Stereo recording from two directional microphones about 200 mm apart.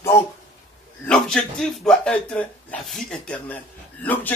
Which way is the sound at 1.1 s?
5° left (ahead or behind).